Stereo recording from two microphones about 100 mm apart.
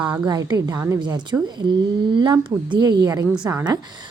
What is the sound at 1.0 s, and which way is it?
Speech, 50° right (ahead or behind).